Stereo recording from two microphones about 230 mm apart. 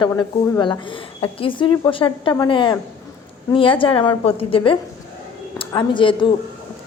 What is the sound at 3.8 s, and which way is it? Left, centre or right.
A woman's voice, left.